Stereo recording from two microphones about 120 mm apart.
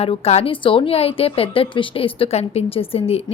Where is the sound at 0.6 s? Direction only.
45° left (ahead or behind).